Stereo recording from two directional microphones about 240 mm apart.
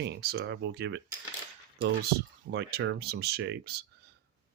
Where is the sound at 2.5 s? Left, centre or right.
Right.